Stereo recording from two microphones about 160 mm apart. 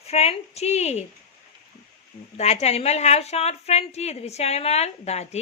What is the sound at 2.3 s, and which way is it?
A woman's voice, 40° left (ahead or behind).